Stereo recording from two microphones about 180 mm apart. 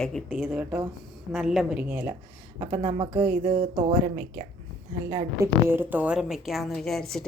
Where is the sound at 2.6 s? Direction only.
25° right (ahead or behind).